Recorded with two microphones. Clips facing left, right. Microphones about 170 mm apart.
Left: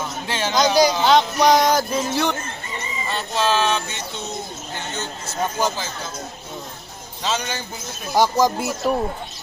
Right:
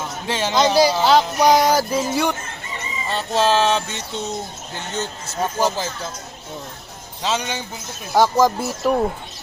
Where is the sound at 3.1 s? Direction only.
35° right (ahead or behind).